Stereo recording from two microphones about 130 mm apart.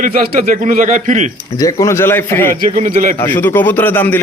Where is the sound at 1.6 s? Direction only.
25° left (ahead or behind).